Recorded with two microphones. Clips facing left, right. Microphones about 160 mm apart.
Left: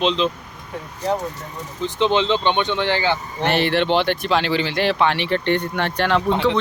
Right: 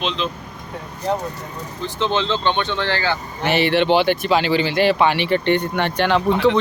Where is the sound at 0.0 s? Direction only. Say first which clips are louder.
Left 5 dB; 30° left (ahead or behind).